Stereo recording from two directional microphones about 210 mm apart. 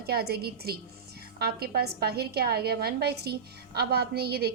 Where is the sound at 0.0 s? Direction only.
50° right (ahead or behind).